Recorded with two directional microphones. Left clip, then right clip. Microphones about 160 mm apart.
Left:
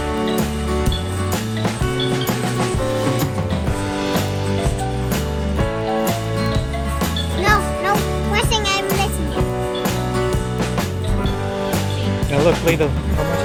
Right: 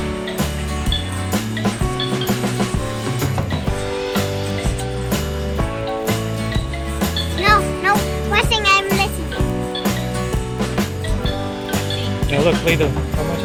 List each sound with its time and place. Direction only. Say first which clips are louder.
7.4 s music: right 2 dB; 35° left (ahead or behind)
12.3 s music: even; 5° left (ahead or behind)